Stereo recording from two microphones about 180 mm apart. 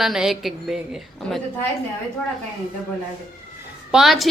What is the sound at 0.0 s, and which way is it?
A woman's voice, centre (ahead or behind).